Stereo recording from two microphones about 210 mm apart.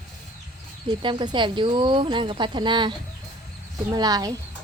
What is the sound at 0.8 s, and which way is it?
Speech, 20° right (ahead or behind).